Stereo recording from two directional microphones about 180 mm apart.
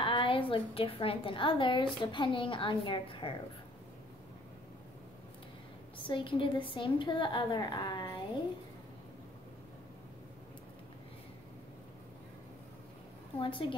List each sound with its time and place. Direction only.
0.0 s a woman's voice: 30° left (ahead or behind)
6.0 s a woman's voice: 30° left (ahead or behind)
13.4 s a woman's voice: 30° left (ahead or behind)